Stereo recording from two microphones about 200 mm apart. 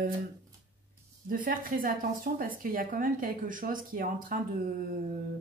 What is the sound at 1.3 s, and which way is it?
Speech, 45° right (ahead or behind).